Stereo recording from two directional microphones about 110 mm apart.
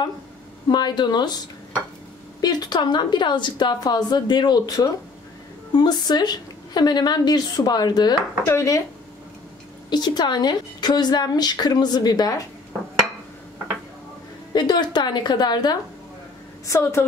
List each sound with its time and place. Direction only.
0.7 s a woman's voice: 40° left (ahead or behind)
2.4 s a woman's voice: 40° left (ahead or behind)
8.5 s a woman's voice: 25° left (ahead or behind)
9.8 s a woman's voice: 40° left (ahead or behind)
14.5 s a woman's voice: 40° left (ahead or behind)
16.6 s a woman's voice: 30° left (ahead or behind)